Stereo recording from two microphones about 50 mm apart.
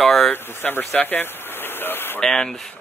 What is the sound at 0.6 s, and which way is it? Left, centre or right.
Speech, left.